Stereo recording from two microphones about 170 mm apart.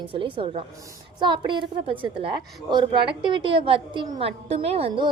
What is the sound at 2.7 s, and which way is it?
A woman's voice, 30° right (ahead or behind).